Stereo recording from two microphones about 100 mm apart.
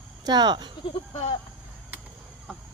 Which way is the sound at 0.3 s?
45° right (ahead or behind).